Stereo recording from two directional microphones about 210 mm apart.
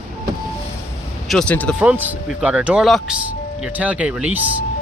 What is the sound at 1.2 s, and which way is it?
Speech, 5° left (ahead or behind).